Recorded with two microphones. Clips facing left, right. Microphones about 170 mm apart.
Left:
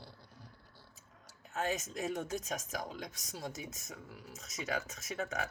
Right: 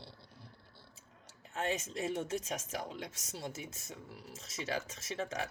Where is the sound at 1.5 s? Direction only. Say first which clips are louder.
Even; 30° right (ahead or behind).